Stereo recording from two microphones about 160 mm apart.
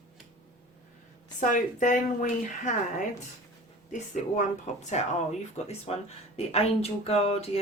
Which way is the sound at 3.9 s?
50° left (ahead or behind).